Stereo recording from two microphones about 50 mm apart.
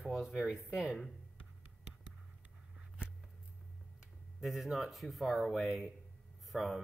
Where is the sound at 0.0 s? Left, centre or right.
Centre.